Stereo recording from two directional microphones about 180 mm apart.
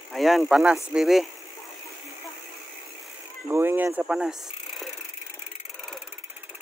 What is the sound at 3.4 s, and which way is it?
Speech, 10° right (ahead or behind).